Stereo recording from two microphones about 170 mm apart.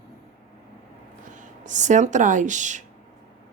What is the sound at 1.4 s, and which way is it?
Speech, 45° right (ahead or behind).